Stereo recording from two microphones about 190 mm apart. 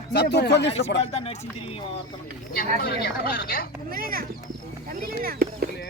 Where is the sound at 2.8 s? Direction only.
55° left (ahead or behind).